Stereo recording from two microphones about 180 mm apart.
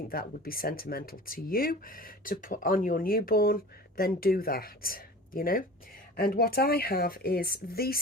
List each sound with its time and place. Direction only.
0.1 s speech: 55° left (ahead or behind)